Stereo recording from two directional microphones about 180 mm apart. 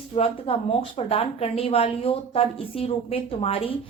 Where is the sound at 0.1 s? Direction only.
30° left (ahead or behind).